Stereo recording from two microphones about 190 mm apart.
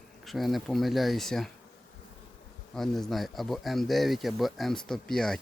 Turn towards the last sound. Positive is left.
turn(degrees=0)  # may be behind; listen again after turning